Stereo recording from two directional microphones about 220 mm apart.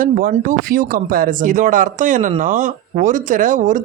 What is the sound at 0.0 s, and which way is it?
Speech, 40° right (ahead or behind).